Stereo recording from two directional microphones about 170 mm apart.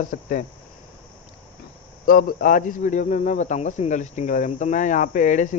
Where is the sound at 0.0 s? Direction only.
55° left (ahead or behind).